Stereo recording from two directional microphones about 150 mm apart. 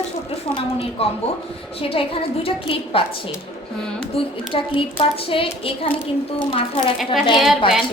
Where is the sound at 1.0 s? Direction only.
40° left (ahead or behind).